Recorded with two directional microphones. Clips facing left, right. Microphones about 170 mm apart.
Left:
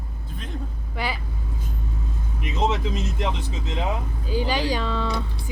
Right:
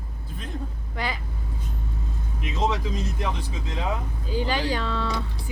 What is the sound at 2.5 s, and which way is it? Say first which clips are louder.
Speech: left 2 dB; 20° left (ahead or behind).